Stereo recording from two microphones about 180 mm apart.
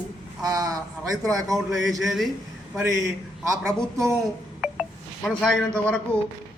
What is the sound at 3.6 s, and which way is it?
Speech, centre (ahead or behind).